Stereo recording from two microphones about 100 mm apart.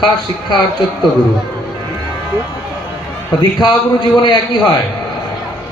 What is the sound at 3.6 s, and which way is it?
Speech, 50° left (ahead or behind).